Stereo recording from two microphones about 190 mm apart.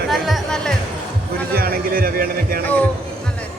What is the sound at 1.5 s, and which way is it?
A man's voice, 50° right (ahead or behind).